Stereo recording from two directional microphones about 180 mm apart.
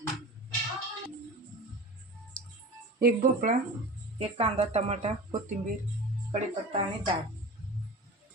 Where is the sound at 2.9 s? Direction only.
50° right (ahead or behind).